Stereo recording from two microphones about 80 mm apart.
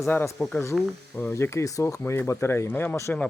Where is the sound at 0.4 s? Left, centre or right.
Left.